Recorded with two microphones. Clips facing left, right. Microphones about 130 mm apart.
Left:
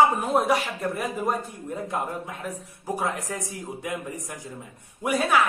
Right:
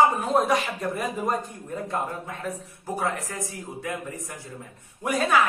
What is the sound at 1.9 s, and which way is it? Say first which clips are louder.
Speech: right 1 dB; 10° left (ahead or behind).